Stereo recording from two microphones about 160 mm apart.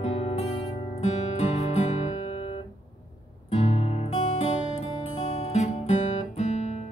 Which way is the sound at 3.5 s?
45° left (ahead or behind).